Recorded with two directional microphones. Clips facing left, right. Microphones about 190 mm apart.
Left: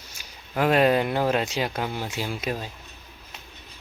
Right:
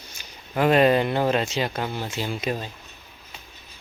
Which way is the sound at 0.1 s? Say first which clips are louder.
Right 1 dB; 5° left (ahead or behind).